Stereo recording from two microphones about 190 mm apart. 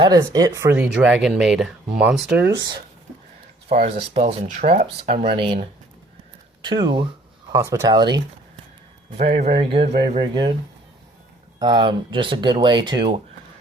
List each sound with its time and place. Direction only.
0.0 s speech: 20° right (ahead or behind)
3.7 s speech: 30° right (ahead or behind)
9.1 s speech: 35° right (ahead or behind)
11.6 s speech: 25° right (ahead or behind)